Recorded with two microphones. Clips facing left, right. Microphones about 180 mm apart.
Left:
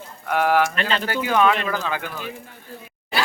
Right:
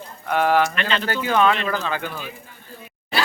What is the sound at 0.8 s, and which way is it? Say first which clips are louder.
Speech: even; 40° left (ahead or behind).